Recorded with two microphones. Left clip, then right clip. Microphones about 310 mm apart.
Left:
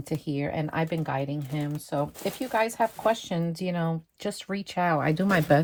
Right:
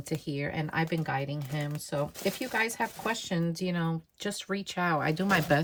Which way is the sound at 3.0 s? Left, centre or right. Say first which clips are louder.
Left 6 dB; centre.